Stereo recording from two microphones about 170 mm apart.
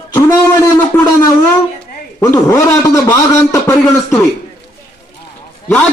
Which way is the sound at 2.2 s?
20° left (ahead or behind).